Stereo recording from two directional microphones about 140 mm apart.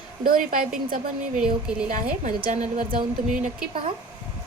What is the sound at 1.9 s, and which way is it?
Speech, 80° right.